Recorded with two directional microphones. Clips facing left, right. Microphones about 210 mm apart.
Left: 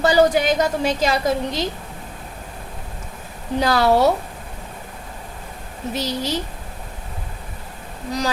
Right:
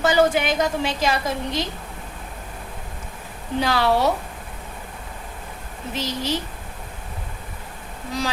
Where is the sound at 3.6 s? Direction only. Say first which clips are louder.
Left 4 dB; 40° left (ahead or behind).